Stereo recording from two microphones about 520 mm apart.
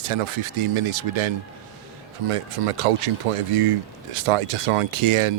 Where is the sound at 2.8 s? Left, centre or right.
Right.